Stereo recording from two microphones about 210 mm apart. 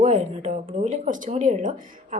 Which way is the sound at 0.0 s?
35° right (ahead or behind).